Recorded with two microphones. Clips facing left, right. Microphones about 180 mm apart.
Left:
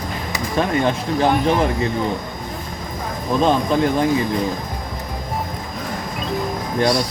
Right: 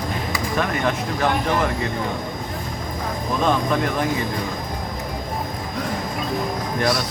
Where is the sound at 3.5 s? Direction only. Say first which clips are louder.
Left 3 dB; 30° left (ahead or behind).